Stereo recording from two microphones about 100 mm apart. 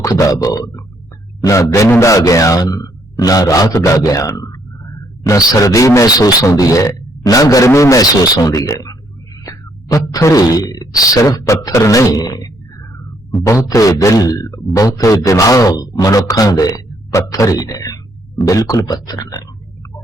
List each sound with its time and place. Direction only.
0.0 s a man's voice: 35° left (ahead or behind)
13.7 s a man's voice: 35° left (ahead or behind)